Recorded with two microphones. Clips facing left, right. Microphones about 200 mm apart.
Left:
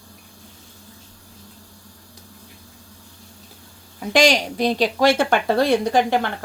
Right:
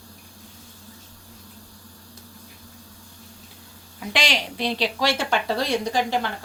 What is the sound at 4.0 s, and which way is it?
A woman's voice, 45° left (ahead or behind).